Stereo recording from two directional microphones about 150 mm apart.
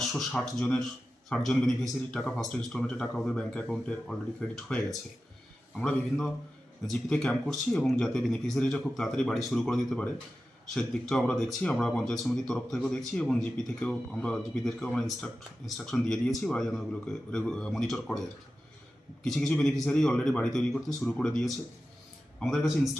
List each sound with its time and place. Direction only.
0.1 s speech: centre (ahead or behind)
19.2 s speech: 5° left (ahead or behind)